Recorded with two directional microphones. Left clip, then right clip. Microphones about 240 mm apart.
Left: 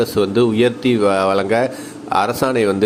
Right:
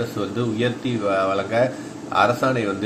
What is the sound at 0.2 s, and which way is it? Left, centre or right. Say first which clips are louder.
A man's voice: left 10 dB; left.